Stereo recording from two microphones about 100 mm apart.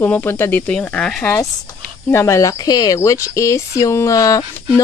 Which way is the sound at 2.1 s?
30° left (ahead or behind).